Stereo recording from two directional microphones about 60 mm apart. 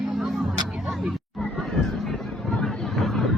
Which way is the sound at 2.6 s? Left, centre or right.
Centre.